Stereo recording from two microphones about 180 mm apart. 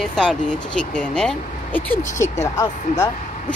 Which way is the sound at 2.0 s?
40° left (ahead or behind).